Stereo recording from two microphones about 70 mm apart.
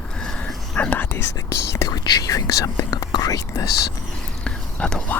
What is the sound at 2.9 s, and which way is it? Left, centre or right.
Speech, left.